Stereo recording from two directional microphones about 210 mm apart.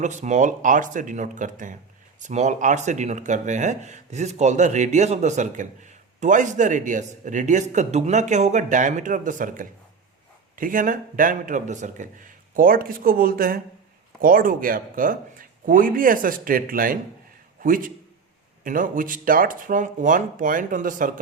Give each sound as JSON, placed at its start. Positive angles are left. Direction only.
{"t": 0.0, "sound": "speech", "side_deg": -35}